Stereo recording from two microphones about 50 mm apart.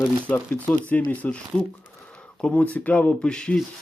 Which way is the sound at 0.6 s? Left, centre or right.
Left.